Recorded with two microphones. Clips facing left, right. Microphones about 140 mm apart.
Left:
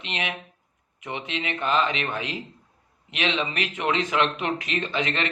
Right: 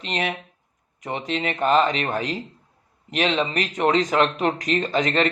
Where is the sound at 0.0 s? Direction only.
40° right (ahead or behind).